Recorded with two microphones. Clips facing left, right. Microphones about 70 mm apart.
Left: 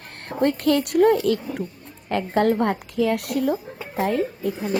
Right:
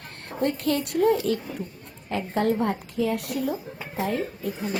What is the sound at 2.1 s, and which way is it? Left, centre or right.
A woman's voice, left.